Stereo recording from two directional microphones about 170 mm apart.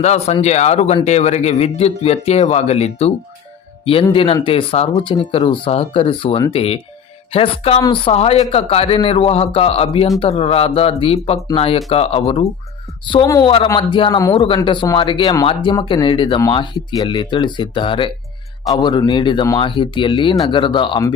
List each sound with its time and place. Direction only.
0.0 s speech: 40° left (ahead or behind)
4.1 s speech: 30° left (ahead or behind)
13.2 s speech: 20° left (ahead or behind)